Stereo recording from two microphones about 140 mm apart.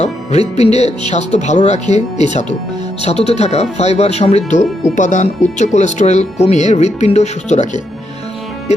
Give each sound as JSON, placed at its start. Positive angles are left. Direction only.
{"t": 0.0, "sound": "speech", "side_deg": 50}